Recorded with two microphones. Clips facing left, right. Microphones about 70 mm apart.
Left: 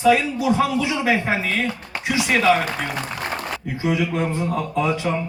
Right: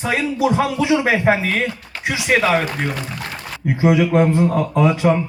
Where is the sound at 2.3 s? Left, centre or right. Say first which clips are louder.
Right 2 dB; right.